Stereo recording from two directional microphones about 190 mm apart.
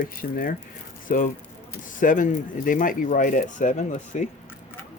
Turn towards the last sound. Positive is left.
turn(degrees=40)  # may be behind; listen again after turning